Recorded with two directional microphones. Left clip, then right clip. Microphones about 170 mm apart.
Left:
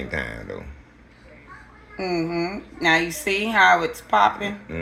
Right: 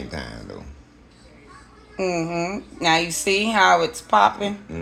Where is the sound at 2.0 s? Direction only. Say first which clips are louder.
Right 1 dB; 35° right (ahead or behind).